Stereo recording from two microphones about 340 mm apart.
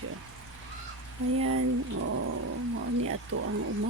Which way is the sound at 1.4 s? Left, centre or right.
Right.